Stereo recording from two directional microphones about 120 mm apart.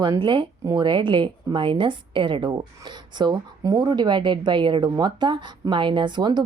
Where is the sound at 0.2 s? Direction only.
45° right (ahead or behind).